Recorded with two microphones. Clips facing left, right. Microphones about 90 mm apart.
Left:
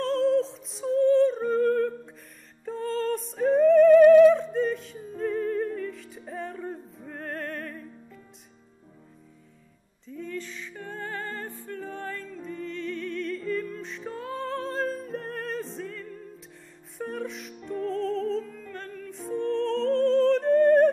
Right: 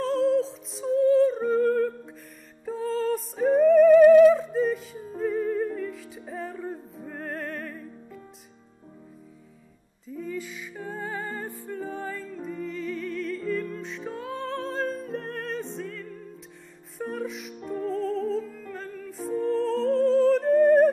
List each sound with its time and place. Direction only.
0.0 s music: centre (ahead or behind)
10.0 s music: 10° right (ahead or behind)